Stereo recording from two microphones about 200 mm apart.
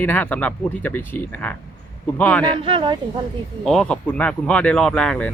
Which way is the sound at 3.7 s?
5° left (ahead or behind).